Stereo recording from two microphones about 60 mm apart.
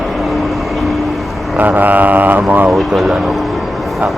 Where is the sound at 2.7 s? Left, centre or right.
Centre.